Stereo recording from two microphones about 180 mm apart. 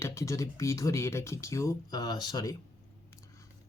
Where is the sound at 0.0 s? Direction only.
15° left (ahead or behind).